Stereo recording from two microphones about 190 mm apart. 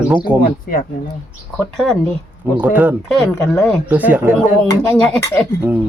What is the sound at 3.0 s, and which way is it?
Speech, 5° left (ahead or behind).